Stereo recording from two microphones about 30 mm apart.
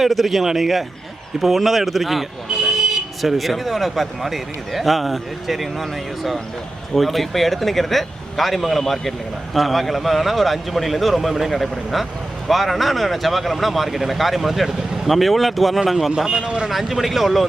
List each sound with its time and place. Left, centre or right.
0.0 s a man's voice: centre
2.6 s vehicle: centre
3.2 s a man's voice: centre
16.1 s speech: right
16.6 s speech: centre